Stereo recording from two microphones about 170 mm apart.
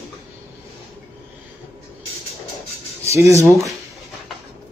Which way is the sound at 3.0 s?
15° right (ahead or behind).